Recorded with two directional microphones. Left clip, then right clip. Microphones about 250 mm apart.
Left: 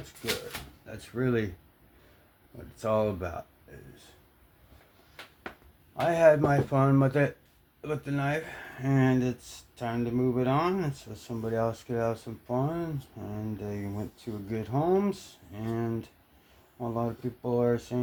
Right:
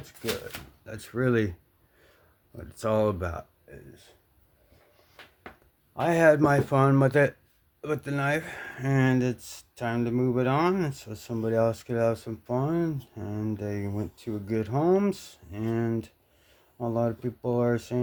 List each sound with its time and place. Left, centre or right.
0.9 s speech: right
2.7 s speech: right
6.1 s speech: right